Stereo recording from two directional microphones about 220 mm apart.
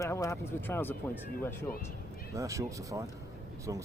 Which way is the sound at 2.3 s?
15° right (ahead or behind).